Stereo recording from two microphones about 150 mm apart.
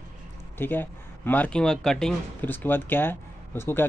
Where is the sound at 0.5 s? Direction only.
15° left (ahead or behind).